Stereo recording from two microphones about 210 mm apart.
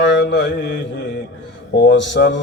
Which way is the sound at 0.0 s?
55° left (ahead or behind).